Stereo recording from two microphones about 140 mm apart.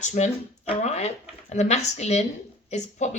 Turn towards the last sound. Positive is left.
turn(degrees=55)  # may be behind; listen again after turning